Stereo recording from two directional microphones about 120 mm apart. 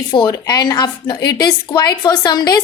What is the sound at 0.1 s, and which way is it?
A woman's voice, 35° left (ahead or behind).